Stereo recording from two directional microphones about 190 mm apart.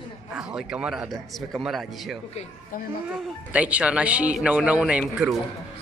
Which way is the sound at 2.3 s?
35° left (ahead or behind).